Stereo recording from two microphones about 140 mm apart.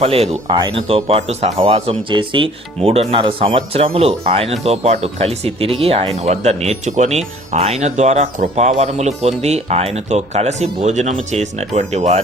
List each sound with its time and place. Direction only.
0.0 s speech: 45° right (ahead or behind)